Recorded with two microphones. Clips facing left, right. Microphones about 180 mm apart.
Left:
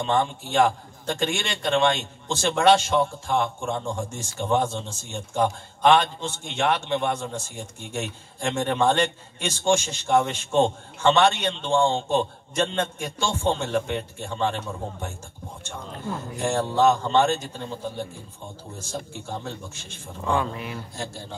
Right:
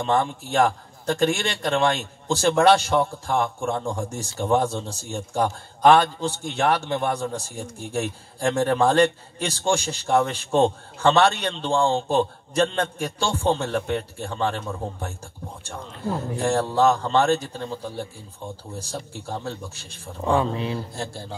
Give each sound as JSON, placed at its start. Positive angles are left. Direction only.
{"t": 0.0, "sound": "a man's voice", "side_deg": -35}
{"t": 18.8, "sound": "a man's voice", "side_deg": -35}